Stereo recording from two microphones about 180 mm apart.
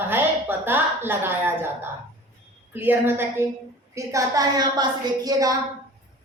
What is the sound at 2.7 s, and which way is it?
A woman's voice, 10° right (ahead or behind).